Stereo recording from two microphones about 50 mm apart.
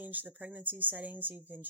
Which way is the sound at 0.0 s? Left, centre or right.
Right.